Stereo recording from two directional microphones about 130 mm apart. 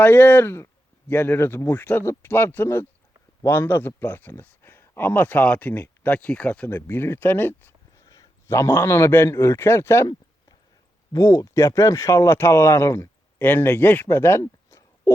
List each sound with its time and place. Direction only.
0.0 s speech: 15° left (ahead or behind)
8.0 s a man's voice: 30° left (ahead or behind)
11.1 s speech: 25° left (ahead or behind)